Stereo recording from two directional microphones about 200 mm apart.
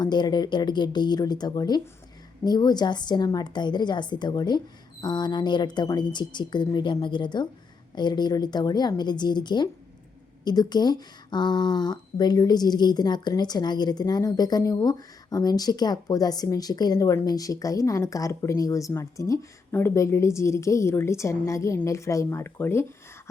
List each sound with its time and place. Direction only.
0.0 s a woman's voice: 20° left (ahead or behind)